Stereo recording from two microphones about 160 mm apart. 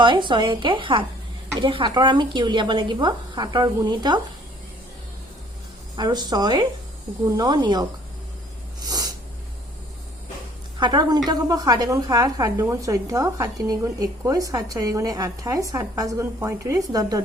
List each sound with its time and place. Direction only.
0.0 s a woman's voice: 30° right (ahead or behind)
6.0 s a woman's voice: 25° right (ahead or behind)
8.8 s snort: 25° right (ahead or behind)
10.8 s a woman's voice: 25° right (ahead or behind)